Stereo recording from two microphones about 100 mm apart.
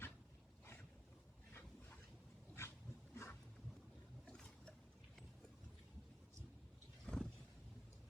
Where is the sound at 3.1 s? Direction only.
25° left (ahead or behind).